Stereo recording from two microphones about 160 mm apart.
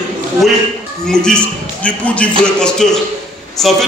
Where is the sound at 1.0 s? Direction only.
5° left (ahead or behind).